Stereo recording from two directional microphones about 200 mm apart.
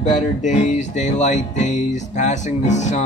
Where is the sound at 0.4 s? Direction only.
40° left (ahead or behind).